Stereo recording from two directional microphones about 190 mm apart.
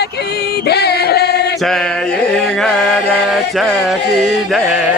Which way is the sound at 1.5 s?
Centre (ahead or behind).